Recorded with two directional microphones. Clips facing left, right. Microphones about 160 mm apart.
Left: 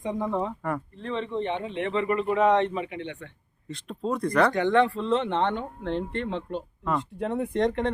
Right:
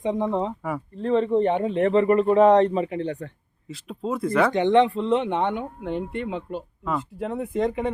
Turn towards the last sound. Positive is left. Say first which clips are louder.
# right 1 dB
turn(degrees=-5)  # may be behind; listen again after turning